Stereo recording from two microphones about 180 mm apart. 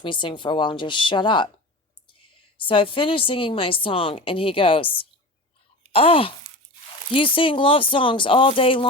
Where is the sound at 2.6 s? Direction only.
30° left (ahead or behind).